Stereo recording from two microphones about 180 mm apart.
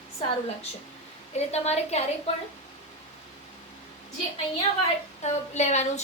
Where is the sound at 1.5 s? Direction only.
35° left (ahead or behind).